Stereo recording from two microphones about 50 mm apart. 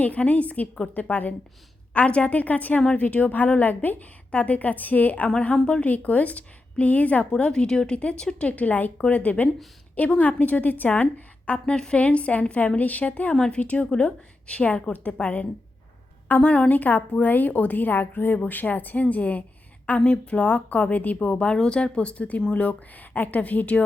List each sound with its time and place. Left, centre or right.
0.0 s a woman's voice: left
1.9 s a woman's voice: left
5.6 s speech: left
5.9 s a woman's voice: left
7.5 s a woman's voice: centre
11.6 s a woman's voice: centre